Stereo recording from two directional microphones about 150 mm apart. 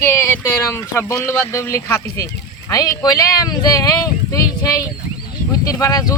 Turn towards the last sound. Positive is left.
turn(degrees=25)  # may be behind; listen again after turning